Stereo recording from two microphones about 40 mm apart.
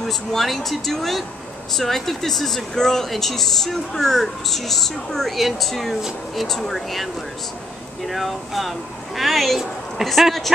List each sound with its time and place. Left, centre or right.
0.0 s a woman's voice: centre